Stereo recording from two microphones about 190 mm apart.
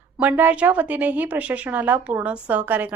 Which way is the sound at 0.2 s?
10° right (ahead or behind).